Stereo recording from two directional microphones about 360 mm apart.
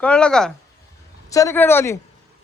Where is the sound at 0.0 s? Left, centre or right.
Centre.